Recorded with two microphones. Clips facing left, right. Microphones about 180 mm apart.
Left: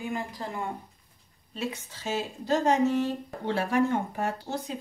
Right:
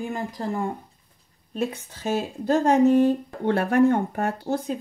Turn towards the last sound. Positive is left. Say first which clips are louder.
# right 6 dB
turn(degrees=-55)  # may be behind; listen again after turning